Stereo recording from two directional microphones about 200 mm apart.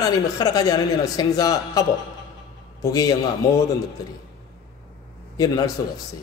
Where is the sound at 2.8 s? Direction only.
20° left (ahead or behind).